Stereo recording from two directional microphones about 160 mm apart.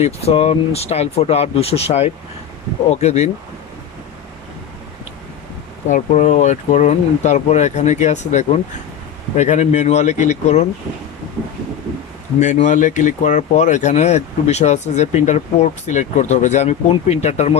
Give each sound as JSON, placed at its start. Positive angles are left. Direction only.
{"t": 0.0, "sound": "speech", "side_deg": 40}
{"t": 5.9, "sound": "speech", "side_deg": 50}
{"t": 12.4, "sound": "speech", "side_deg": 50}